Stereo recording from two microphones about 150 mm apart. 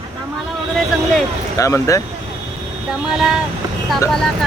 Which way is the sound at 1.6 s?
20° left (ahead or behind).